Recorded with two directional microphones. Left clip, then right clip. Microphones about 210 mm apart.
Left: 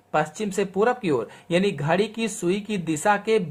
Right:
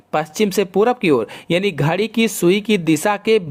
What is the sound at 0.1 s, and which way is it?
Speech, 35° right (ahead or behind).